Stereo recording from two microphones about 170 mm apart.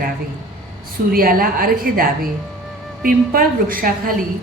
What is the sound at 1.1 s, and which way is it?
A woman's voice, 60° right (ahead or behind).